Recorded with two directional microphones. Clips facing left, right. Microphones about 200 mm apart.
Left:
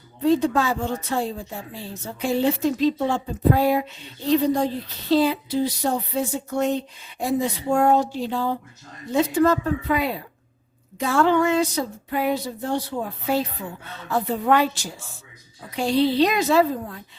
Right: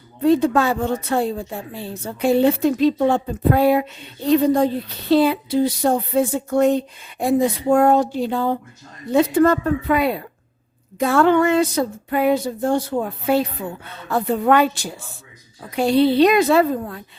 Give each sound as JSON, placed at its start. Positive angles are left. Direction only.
{"t": 0.2, "sound": "speech", "side_deg": -60}